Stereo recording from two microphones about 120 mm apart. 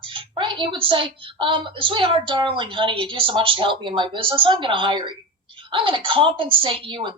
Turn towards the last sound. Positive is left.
turn(degrees=-45)  # may be behind; listen again after turning